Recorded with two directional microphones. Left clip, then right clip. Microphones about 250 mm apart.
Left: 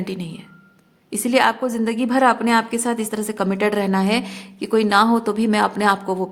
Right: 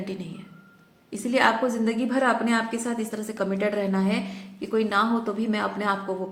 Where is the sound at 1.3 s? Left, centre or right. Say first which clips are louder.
Left 4 dB; left.